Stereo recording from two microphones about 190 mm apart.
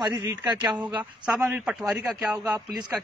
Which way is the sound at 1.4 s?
5° right (ahead or behind).